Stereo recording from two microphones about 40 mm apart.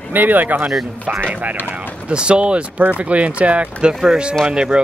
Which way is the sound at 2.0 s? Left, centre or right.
Right.